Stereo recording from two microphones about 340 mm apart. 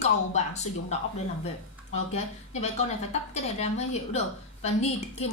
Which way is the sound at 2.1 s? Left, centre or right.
Centre.